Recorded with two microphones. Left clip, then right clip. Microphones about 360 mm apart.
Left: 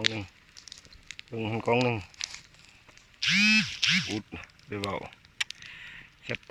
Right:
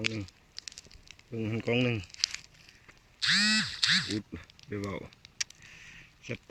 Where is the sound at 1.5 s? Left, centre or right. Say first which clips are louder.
Left 4 dB; centre.